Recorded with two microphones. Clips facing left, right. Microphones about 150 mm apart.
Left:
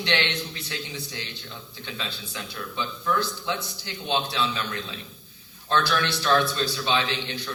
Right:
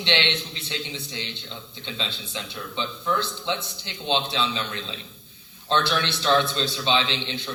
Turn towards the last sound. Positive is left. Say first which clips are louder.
# even
turn(degrees=-20)  # may be behind; listen again after turning